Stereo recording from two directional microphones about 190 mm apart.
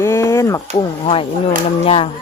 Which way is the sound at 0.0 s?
15° left (ahead or behind).